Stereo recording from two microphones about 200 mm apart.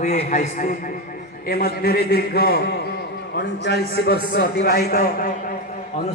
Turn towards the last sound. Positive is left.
turn(degrees=50)  # may be behind; listen again after turning